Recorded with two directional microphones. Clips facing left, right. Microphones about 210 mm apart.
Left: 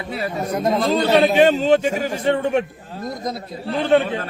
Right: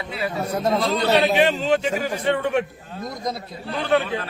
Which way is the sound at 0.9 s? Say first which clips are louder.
Left 5 dB; 45° left (ahead or behind).